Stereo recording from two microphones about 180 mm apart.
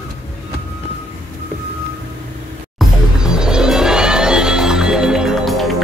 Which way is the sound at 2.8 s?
5° right (ahead or behind).